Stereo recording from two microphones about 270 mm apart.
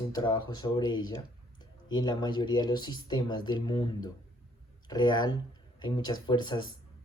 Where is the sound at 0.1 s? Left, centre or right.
Centre.